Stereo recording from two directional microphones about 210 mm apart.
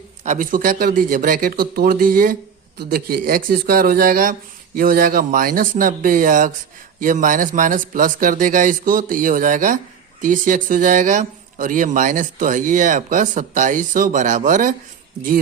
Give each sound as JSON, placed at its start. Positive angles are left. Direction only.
{"t": 0.3, "sound": "speech", "side_deg": -40}